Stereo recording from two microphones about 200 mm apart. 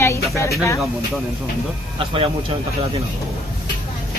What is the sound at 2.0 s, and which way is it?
Speech, 25° right (ahead or behind).